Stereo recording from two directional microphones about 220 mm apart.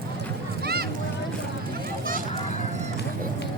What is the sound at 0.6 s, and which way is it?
Boat, 45° right (ahead or behind).